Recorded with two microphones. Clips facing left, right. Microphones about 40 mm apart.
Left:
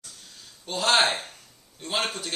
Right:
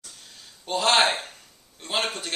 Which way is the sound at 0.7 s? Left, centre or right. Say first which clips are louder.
Right 5 dB; centre.